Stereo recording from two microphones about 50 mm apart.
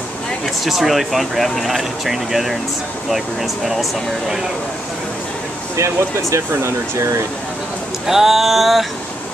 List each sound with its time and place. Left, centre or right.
0.7 s speech: centre
5.8 s speech: right
8.1 s speech: centre